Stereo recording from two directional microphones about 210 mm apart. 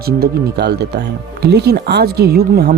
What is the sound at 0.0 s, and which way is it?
Speech, 50° right (ahead or behind).